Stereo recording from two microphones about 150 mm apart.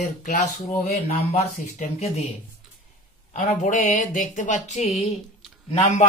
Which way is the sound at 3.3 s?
50° left (ahead or behind).